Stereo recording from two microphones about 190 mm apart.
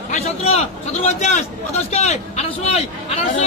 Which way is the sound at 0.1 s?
35° left (ahead or behind).